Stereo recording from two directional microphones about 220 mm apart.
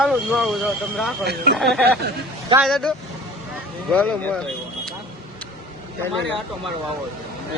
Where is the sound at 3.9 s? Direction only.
5° left (ahead or behind).